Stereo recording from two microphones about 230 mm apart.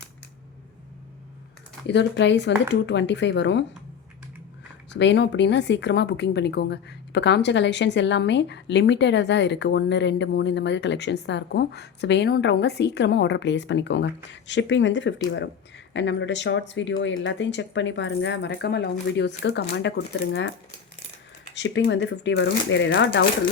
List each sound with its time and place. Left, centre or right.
1.9 s speech: left
4.9 s speech: left
21.5 s speech: left